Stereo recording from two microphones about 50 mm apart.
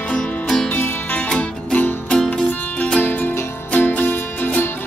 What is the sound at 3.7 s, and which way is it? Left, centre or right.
Music, left.